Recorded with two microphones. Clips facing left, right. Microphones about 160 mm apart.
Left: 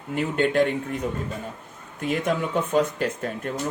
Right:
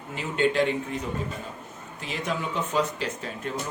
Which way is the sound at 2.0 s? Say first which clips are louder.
Left 7 dB; 55° left (ahead or behind).